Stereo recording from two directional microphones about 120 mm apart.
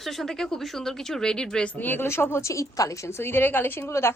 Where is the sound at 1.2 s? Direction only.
5° left (ahead or behind).